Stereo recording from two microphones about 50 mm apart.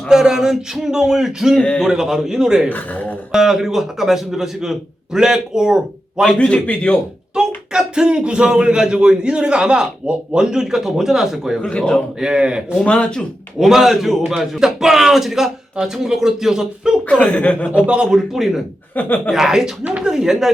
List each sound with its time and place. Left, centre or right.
0.1 s speech: centre
2.6 s speech: left
3.3 s speech: centre
6.4 s a man's voice: left
7.3 s speech: centre
11.7 s a man's voice: centre
12.2 s speech: centre
12.8 s a man's voice: left
13.6 s speech: centre
17.1 s a man's voice: left
17.7 s speech: right
18.1 s speech: centre
18.9 s speech: left
19.3 s speech: centre